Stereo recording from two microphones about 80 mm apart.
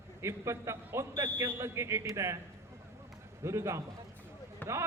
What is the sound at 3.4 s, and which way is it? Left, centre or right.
Speech, right.